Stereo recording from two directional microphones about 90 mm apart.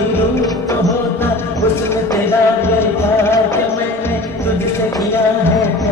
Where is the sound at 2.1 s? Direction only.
25° left (ahead or behind).